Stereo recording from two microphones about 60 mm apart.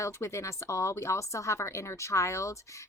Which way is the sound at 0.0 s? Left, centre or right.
Left.